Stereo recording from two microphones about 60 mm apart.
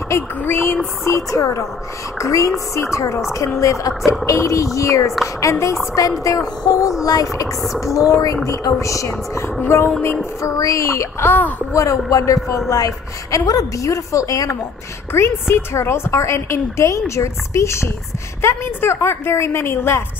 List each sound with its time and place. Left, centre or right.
0.4 s a woman's voice: left
1.0 s a woman's voice: left
6.2 s speech: left
7.8 s a woman's voice: left
8.7 s a woman's voice: left
10.4 s speech: left
11.2 s a woman's voice: left
11.7 s a woman's voice: left
13.5 s a woman's voice: left
15.1 s a woman's voice: left